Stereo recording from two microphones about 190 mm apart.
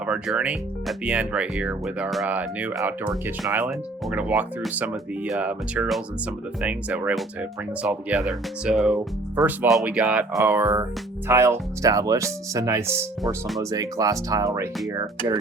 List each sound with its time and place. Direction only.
0.0 s speech: 5° right (ahead or behind)